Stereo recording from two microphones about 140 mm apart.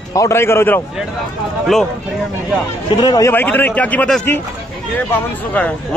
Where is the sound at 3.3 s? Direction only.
15° left (ahead or behind).